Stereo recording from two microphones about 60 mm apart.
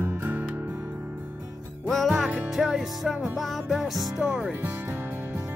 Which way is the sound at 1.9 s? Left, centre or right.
Centre.